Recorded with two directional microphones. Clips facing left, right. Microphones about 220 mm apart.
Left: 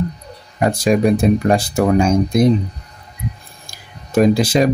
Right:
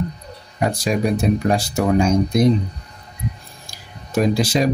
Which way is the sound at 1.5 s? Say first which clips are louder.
Left 3 dB; 55° left (ahead or behind).